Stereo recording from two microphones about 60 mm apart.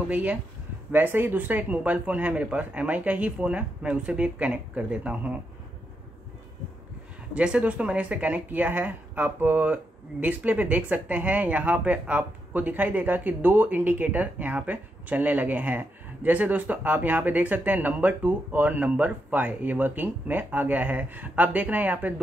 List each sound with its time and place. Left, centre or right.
0.1 s speech: right
7.3 s speech: centre